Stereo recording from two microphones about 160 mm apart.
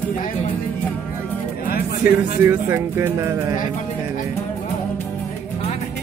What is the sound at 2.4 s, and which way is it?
Speech, 15° right (ahead or behind).